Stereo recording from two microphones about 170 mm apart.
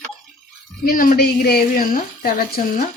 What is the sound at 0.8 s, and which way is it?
A woman's voice, 55° left (ahead or behind).